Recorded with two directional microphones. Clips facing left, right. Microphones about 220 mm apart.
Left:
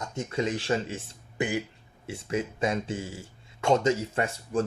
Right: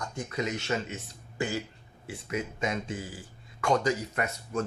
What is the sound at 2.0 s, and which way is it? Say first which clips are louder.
Speech: left 4 dB; 30° left (ahead or behind).